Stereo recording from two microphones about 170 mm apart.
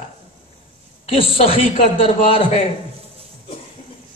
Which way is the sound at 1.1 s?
35° left (ahead or behind).